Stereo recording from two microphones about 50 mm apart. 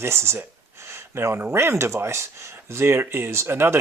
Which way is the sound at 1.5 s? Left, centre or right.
Right.